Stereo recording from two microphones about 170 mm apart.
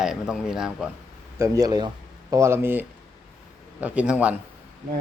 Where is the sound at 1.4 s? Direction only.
20° right (ahead or behind).